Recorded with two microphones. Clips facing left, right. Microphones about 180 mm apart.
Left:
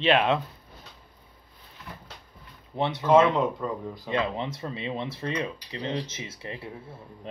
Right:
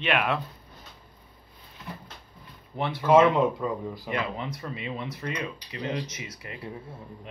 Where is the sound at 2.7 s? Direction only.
20° left (ahead or behind).